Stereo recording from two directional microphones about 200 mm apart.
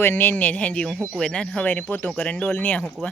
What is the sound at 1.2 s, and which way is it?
Speech, 5° left (ahead or behind).